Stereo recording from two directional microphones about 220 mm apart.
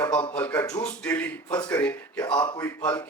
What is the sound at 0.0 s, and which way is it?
A man's voice, 10° left (ahead or behind).